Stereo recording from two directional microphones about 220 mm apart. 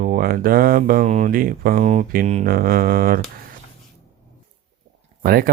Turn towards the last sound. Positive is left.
turn(degrees=-40)  # may be behind; listen again after turning